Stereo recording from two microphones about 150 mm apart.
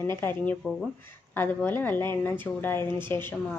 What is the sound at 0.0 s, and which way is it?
A woman's voice, 15° left (ahead or behind).